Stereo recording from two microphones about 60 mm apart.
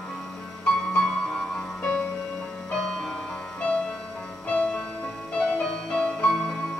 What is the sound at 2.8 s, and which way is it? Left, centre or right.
Music, centre.